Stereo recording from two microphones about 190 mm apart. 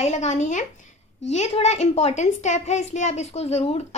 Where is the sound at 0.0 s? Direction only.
35° left (ahead or behind).